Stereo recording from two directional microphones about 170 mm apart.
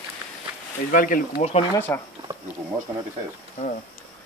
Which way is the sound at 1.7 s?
10° left (ahead or behind).